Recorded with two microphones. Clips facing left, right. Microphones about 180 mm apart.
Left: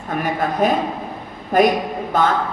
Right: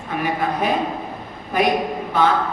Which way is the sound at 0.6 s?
45° left (ahead or behind).